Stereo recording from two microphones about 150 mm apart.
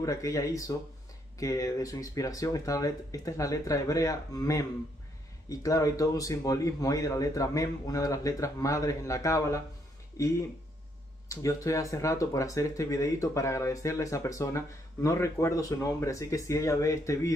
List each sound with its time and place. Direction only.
0.0 s speech: 20° left (ahead or behind)